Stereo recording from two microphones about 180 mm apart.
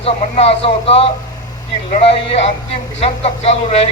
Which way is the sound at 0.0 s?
35° left (ahead or behind).